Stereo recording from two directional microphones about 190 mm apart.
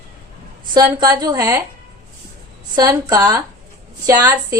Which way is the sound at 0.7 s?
20° right (ahead or behind).